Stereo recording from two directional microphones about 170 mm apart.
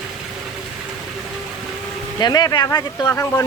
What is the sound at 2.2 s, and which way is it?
Speech, 25° left (ahead or behind).